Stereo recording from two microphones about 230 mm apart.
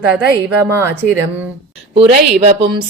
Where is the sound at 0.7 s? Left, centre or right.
Centre.